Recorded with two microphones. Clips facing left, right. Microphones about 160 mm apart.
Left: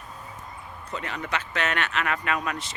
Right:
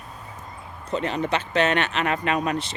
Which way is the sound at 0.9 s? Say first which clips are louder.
Right 7 dB; 25° right (ahead or behind).